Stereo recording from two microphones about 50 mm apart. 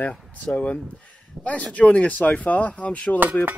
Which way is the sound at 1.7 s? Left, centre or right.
Left.